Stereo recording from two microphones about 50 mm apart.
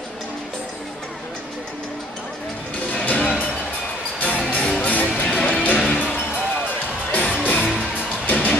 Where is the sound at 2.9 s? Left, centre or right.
Left.